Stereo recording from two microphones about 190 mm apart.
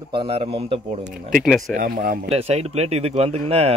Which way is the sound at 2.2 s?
35° right (ahead or behind).